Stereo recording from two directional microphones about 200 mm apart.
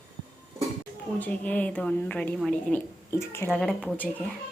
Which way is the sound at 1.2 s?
10° left (ahead or behind).